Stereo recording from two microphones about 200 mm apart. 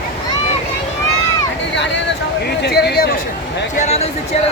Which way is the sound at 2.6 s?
55° left (ahead or behind).